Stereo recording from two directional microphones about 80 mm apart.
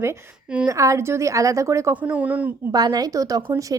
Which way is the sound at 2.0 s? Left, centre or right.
Centre.